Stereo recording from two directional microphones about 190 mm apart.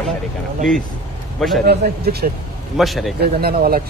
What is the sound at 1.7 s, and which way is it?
Speech, 55° right (ahead or behind).